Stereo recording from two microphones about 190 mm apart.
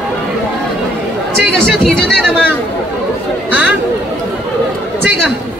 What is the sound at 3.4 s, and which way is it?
Chatter, 10° right (ahead or behind).